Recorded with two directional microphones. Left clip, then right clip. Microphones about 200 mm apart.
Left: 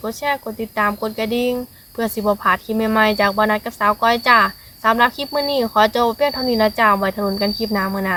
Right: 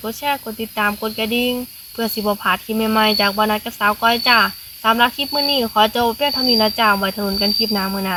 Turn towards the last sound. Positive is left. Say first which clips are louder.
# right 2 dB
turn(degrees=15)  # may be behind; listen again after turning